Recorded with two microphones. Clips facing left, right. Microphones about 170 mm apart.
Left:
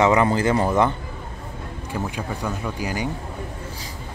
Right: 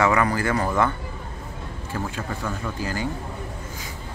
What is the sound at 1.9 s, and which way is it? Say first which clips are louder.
Speech: left 2 dB; 15° left (ahead or behind).